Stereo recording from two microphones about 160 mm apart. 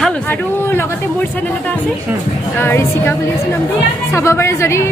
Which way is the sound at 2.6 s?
15° left (ahead or behind).